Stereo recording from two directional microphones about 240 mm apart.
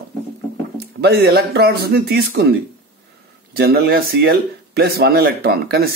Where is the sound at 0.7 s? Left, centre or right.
Right.